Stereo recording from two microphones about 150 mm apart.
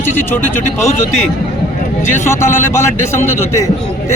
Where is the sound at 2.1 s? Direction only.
15° left (ahead or behind).